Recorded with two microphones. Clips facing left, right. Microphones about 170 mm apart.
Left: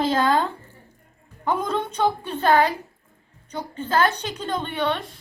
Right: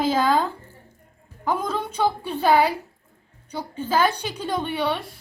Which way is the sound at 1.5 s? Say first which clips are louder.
Left 1 dB; 5° right (ahead or behind).